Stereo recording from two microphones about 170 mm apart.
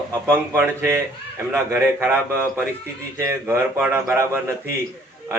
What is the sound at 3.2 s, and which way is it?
A man's voice, 15° right (ahead or behind).